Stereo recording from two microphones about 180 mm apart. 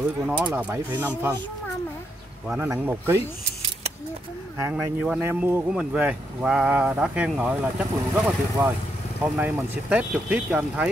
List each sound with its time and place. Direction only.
0.4 s speech: 5° right (ahead or behind)
2.4 s speech: 10° right (ahead or behind)
4.6 s speech: 15° right (ahead or behind)